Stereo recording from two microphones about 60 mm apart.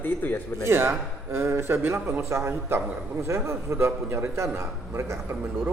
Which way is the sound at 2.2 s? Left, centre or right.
Right.